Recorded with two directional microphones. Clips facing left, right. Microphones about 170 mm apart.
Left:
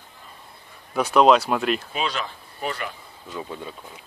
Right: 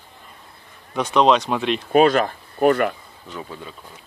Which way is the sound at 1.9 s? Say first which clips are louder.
Right 13 dB; 50° right (ahead or behind).